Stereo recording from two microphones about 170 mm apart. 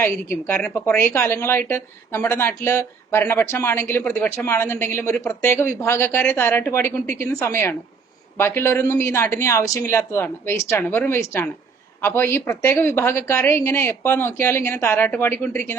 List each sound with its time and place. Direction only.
0.0 s a woman's voice: 15° left (ahead or behind)